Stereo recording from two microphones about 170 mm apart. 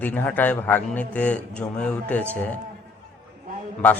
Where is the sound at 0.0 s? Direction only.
10° left (ahead or behind).